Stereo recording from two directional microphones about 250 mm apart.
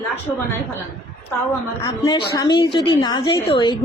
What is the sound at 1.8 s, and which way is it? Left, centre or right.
Speech, centre.